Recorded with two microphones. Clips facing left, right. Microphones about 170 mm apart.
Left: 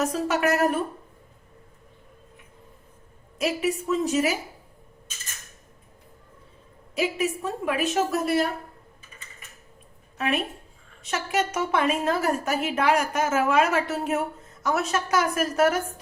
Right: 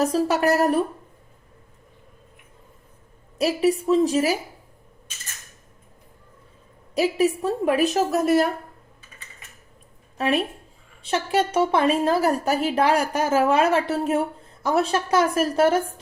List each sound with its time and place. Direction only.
0.0 s a woman's voice: 35° right (ahead or behind)
3.3 s a woman's voice: 35° right (ahead or behind)
6.9 s a woman's voice: 35° right (ahead or behind)
10.2 s a woman's voice: 35° right (ahead or behind)